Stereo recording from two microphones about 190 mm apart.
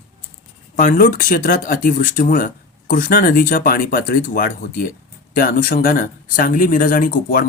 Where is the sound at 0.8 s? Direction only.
45° left (ahead or behind).